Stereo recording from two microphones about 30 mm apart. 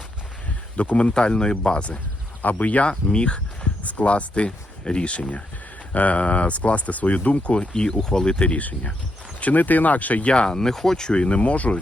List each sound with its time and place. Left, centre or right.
0.8 s speech: left
1.1 s speech: left
2.4 s speech: left
3.1 s speech: left
3.8 s speech: left
5.9 s speech: left
7.7 s speech: left
9.4 s speech: left
10.2 s speech: left
10.6 s speech: centre
11.1 s speech: left